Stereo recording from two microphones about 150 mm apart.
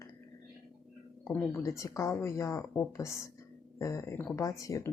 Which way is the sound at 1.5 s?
20° left (ahead or behind).